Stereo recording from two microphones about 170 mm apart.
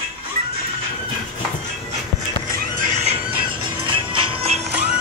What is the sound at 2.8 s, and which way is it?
Music, 40° right (ahead or behind).